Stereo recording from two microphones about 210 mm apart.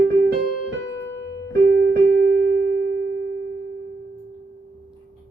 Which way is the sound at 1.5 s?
50° right (ahead or behind).